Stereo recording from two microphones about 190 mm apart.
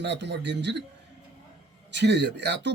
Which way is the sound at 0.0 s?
65° right (ahead or behind).